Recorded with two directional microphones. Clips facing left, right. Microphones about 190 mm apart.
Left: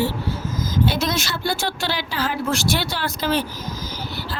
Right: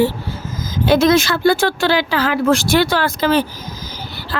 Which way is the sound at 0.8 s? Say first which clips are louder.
Right 13 dB; 90° right.